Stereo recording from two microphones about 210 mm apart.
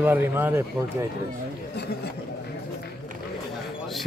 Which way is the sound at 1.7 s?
55° left (ahead or behind).